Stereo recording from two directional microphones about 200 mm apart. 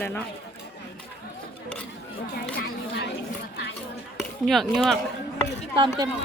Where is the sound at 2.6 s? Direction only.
55° left (ahead or behind).